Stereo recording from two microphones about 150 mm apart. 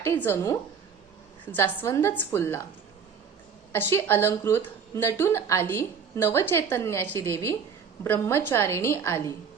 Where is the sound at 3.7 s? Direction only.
15° left (ahead or behind).